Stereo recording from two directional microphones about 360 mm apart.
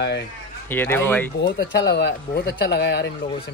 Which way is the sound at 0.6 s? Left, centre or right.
Centre.